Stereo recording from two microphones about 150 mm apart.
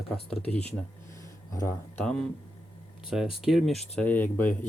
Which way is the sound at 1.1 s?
20° left (ahead or behind).